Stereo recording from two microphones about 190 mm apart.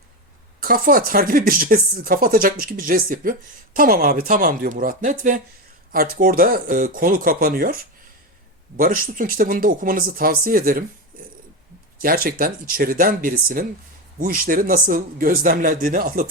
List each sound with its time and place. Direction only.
0.6 s speech: 50° right (ahead or behind)
11.9 s speech: 50° right (ahead or behind)